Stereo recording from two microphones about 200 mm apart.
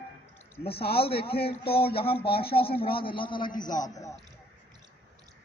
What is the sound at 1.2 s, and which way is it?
Speech, 50° left (ahead or behind).